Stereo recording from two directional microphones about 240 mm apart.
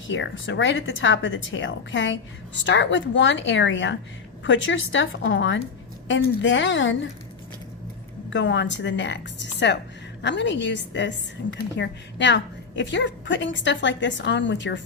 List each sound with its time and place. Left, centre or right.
0.1 s a woman's voice: left
8.3 s a woman's voice: left